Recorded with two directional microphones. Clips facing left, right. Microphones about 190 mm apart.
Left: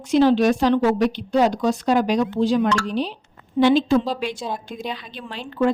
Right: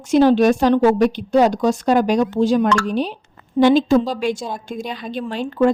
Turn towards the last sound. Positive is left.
turn(degrees=-45)  # may be behind; listen again after turning